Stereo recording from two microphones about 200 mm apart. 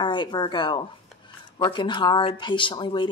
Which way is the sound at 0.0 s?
25° left (ahead or behind).